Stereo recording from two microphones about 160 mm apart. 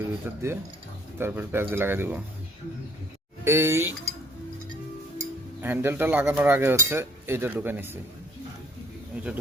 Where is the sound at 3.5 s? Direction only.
15° right (ahead or behind).